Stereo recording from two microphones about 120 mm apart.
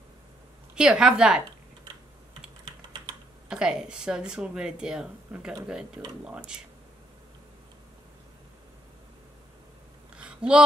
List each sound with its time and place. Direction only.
0.7 s speech: 5° right (ahead or behind)
2.6 s typing: 40° right (ahead or behind)
3.4 s speech: 5° right (ahead or behind)
10.1 s a sound: 10° right (ahead or behind)